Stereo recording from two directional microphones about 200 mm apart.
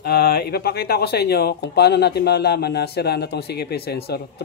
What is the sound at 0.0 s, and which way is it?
Speech, 50° left (ahead or behind).